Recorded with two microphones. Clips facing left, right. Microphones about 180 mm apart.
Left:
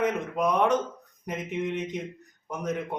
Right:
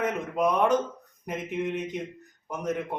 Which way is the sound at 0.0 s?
5° right (ahead or behind).